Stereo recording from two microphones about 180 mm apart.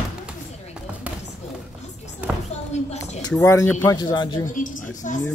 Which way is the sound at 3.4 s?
15° left (ahead or behind).